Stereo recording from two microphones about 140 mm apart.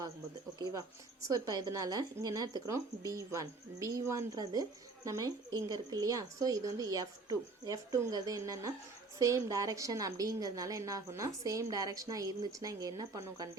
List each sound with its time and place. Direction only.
0.6 s a woman's voice: 25° right (ahead or behind)